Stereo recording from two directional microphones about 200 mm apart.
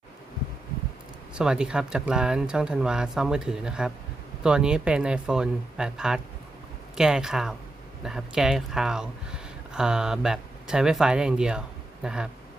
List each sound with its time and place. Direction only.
1.4 s speech: 5° right (ahead or behind)